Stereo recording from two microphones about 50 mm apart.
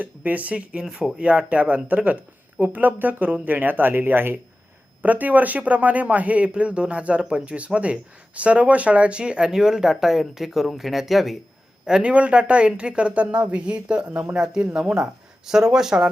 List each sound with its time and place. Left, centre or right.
0.2 s speech: right
5.0 s speech: right; by 11.3 s centre
11.9 s speech: centre